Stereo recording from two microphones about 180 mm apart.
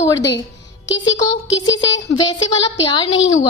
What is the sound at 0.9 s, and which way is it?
Speech, 90° left.